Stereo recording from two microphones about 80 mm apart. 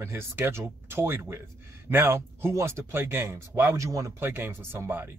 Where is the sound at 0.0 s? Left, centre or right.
Right.